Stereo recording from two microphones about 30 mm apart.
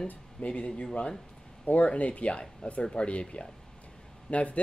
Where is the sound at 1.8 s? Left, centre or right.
Left.